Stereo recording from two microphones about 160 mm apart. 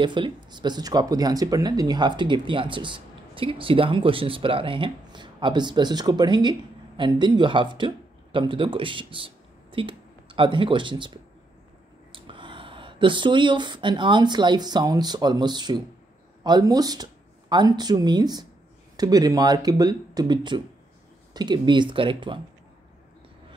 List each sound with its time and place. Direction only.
0.0 s speech: 30° right (ahead or behind)